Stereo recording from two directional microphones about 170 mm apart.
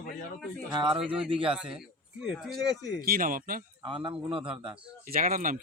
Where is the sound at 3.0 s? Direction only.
60° right (ahead or behind).